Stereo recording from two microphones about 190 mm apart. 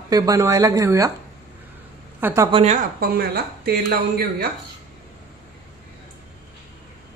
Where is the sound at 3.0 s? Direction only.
55° right (ahead or behind).